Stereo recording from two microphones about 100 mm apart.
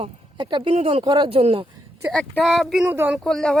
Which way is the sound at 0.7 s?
85° right.